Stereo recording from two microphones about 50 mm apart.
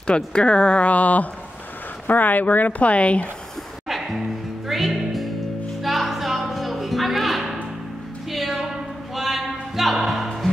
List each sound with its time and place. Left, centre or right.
0.0 s speech: centre
3.9 s music: centre